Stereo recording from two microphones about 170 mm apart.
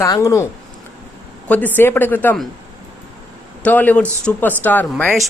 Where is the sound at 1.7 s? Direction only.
10° left (ahead or behind).